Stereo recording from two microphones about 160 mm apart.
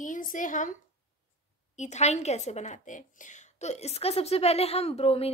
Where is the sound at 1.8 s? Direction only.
45° left (ahead or behind).